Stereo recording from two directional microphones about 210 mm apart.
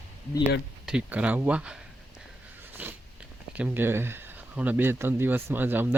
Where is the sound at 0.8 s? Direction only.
5° right (ahead or behind).